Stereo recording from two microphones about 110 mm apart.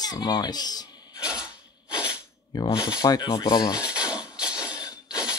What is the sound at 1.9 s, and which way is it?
Sneeze, 10° right (ahead or behind).